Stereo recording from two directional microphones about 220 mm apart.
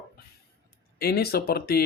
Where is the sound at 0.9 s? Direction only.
45° left (ahead or behind).